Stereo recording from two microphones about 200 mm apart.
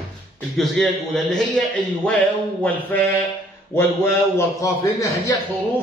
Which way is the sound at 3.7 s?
15° left (ahead or behind).